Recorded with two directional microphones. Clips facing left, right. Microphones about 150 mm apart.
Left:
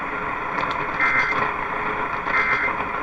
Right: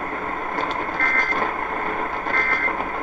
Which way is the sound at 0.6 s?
40° right (ahead or behind).